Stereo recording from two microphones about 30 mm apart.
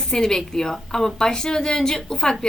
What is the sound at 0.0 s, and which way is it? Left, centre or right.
A woman's voice, centre.